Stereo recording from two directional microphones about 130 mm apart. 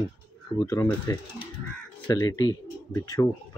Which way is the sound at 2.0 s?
30° left (ahead or behind).